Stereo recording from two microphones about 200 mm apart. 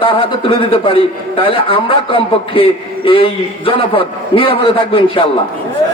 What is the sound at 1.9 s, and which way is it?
A man's voice, 25° left (ahead or behind).